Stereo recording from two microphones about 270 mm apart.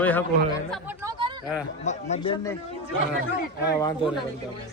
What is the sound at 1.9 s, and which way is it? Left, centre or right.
Speech, left.